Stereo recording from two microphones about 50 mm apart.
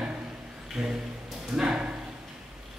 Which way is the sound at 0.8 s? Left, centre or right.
Centre.